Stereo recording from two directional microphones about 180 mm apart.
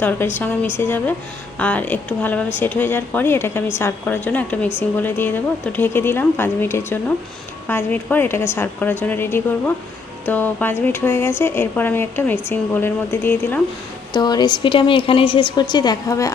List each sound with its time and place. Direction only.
0.0 s speech: 10° left (ahead or behind)
14.1 s a woman's voice: 20° left (ahead or behind)